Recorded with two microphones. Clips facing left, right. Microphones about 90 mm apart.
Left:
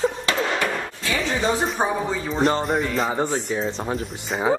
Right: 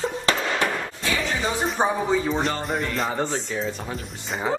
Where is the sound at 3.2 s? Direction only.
15° left (ahead or behind).